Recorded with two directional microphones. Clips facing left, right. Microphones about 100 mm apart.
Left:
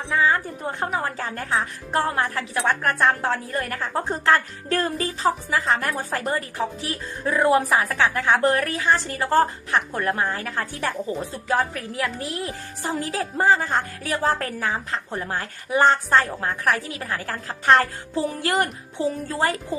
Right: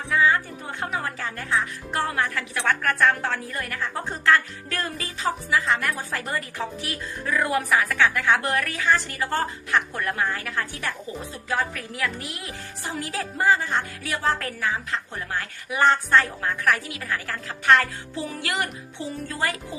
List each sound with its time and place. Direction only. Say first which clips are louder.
0.1 s speech: even; 30° left (ahead or behind)